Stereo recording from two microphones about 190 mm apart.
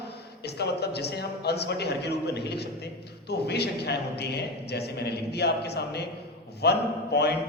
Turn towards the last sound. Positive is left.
turn(degrees=60)  # may be behind; listen again after turning